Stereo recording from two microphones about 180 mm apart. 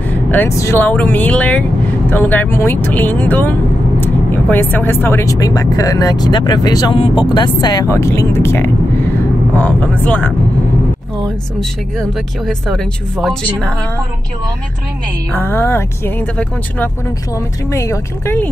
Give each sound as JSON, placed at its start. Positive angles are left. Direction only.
{"t": 0.3, "sound": "speech", "side_deg": 15}
{"t": 12.0, "sound": "speech", "side_deg": 5}
{"t": 15.3, "sound": "speech", "side_deg": 10}